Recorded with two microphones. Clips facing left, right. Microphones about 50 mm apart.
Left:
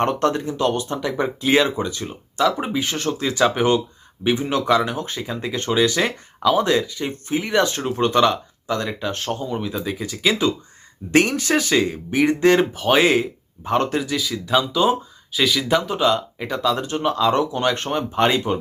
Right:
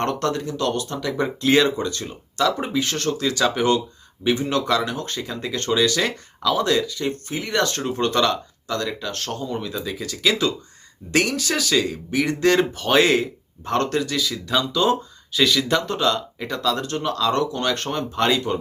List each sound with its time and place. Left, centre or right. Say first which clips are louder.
0.0 s speech: left 3 dB; left
11.1 s speech: left 4 dB; left